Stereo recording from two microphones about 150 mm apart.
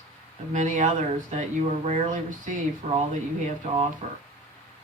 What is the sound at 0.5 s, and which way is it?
Speech, 55° right (ahead or behind).